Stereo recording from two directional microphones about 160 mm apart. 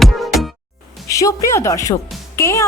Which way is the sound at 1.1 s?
20° left (ahead or behind).